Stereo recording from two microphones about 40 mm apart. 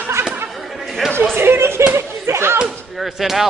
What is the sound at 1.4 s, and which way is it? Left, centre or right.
Speech, right.